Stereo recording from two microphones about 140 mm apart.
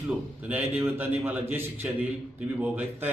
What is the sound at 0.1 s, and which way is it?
A man's voice, 10° right (ahead or behind).